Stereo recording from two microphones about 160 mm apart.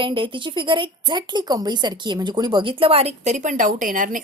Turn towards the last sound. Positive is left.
turn(degrees=-55)  # may be behind; listen again after turning